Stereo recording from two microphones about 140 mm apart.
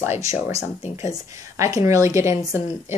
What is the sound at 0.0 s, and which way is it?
A woman's voice, 20° right (ahead or behind).